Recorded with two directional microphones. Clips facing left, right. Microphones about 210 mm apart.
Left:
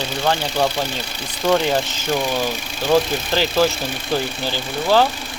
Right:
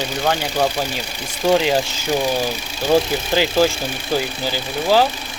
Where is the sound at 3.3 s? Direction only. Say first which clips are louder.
Right 2 dB; 15° right (ahead or behind).